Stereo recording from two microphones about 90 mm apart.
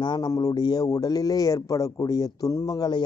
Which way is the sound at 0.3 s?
45° left (ahead or behind).